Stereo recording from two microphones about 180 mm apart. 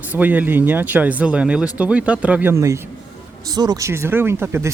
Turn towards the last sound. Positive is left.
turn(degrees=-15)  # may be behind; listen again after turning